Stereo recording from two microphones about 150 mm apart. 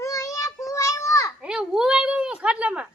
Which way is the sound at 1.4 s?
5° right (ahead or behind).